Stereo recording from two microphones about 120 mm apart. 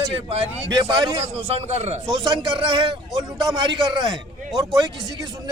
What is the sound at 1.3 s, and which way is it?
Speech, 60° right (ahead or behind).